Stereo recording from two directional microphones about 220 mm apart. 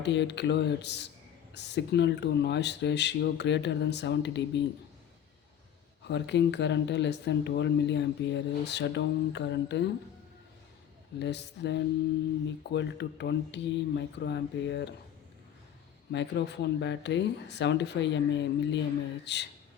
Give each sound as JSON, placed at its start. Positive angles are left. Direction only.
{"t": 0.0, "sound": "speech", "side_deg": 50}
{"t": 6.1, "sound": "speech", "side_deg": 55}
{"t": 11.2, "sound": "speech", "side_deg": 50}
{"t": 16.1, "sound": "speech", "side_deg": 50}